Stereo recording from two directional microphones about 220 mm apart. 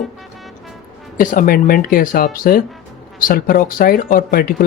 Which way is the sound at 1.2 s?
40° left (ahead or behind).